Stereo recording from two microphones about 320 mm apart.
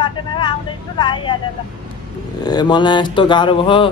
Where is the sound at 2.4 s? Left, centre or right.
Centre.